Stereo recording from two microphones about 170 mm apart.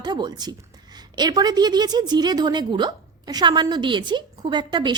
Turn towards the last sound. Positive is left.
turn(degrees=-25)  # may be behind; listen again after turning